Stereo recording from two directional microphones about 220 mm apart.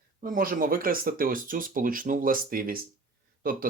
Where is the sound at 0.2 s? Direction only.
40° right (ahead or behind).